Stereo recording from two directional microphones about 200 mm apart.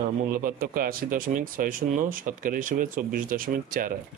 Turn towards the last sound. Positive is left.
turn(degrees=-45)  # may be behind; listen again after turning